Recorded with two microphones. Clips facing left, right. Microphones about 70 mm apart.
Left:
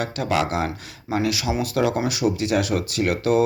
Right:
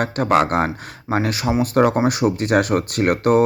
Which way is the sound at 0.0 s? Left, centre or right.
Right.